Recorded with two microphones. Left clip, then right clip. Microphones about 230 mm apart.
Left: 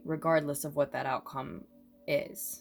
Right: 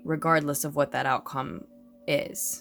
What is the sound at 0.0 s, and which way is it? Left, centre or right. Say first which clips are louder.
Speech: right 4 dB; right.